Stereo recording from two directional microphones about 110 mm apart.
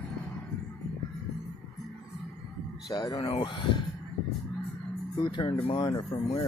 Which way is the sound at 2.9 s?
40° left (ahead or behind).